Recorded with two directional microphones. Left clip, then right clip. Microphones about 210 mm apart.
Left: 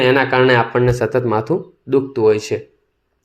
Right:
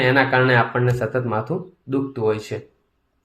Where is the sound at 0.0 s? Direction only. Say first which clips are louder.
Left 4 dB; 25° left (ahead or behind).